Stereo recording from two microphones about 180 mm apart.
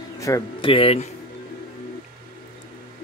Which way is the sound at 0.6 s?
30° left (ahead or behind).